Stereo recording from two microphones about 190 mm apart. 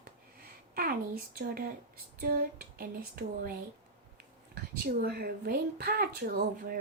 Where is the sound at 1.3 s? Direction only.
50° right (ahead or behind).